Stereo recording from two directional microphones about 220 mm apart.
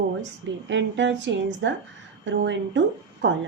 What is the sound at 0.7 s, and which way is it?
A woman's voice, 55° right (ahead or behind).